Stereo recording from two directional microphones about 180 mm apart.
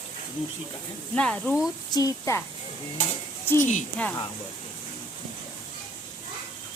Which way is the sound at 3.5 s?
45° left (ahead or behind).